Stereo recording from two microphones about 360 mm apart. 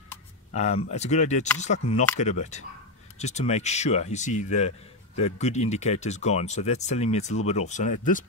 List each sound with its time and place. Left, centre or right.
0.5 s speech: centre